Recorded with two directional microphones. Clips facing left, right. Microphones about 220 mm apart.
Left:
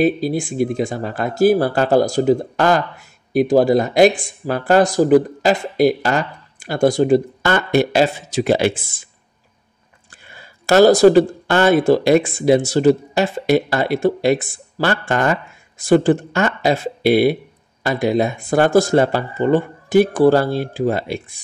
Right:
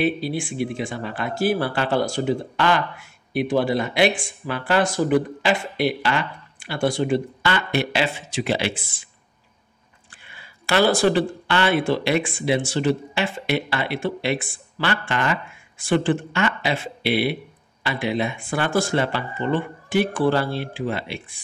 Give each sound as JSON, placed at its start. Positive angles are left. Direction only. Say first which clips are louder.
{"t": 0.0, "sound": "speech", "louder": "left 6 dB", "side_deg": 40}
{"t": 10.2, "sound": "speech", "louder": "left 10 dB", "side_deg": 40}